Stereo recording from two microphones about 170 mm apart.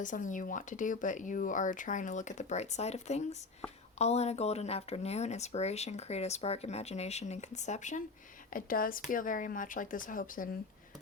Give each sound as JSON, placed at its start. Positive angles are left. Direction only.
{"t": 0.0, "sound": "speech", "side_deg": 50}
{"t": 8.5, "sound": "speech", "side_deg": 55}